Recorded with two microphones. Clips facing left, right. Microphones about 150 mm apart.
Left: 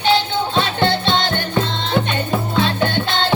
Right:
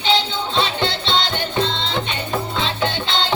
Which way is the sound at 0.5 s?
50° left (ahead or behind).